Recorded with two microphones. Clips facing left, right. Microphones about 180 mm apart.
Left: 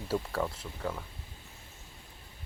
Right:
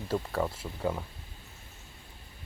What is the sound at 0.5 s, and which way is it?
Speech, 10° right (ahead or behind).